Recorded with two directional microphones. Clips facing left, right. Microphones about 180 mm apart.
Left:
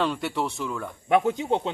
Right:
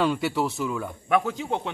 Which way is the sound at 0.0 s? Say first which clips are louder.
Right 2 dB; 5° right (ahead or behind).